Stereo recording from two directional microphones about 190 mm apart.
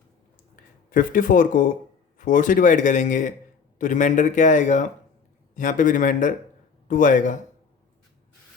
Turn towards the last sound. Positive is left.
turn(degrees=40)  # may be behind; listen again after turning